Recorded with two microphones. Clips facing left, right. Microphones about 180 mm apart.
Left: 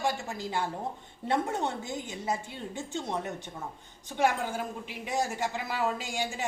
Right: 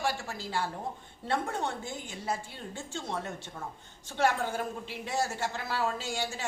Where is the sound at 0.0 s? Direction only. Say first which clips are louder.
Left 2 dB; 20° left (ahead or behind).